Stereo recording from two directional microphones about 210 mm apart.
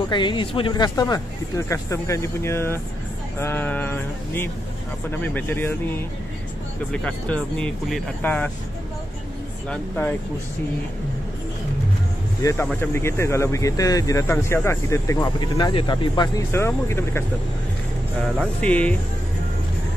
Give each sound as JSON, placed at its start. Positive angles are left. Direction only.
{"t": 0.1, "sound": "speech", "side_deg": 20}
{"t": 9.7, "sound": "speech", "side_deg": 10}
{"t": 12.4, "sound": "speech", "side_deg": 15}
{"t": 18.6, "sound": "speech", "side_deg": 5}